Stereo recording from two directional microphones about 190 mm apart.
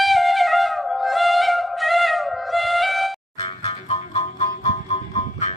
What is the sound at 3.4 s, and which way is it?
Music, 30° left (ahead or behind).